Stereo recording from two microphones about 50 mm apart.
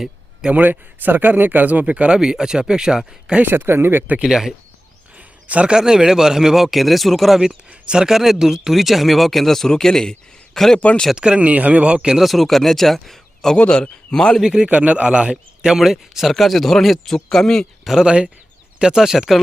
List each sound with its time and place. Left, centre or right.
0.5 s speech: right
2.1 s speech: centre
3.4 s speech: right
4.2 s speech: centre
5.1 s a sound: right
5.7 s speech: centre
7.7 s speech: centre
10.8 s speech: left
11.1 s speech: centre
12.2 s speech: centre
14.3 s speech: centre
14.7 s speech: right
15.8 s speech: centre
18.0 s speech: centre